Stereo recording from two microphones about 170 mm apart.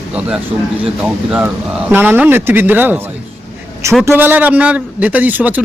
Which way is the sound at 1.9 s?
10° right (ahead or behind).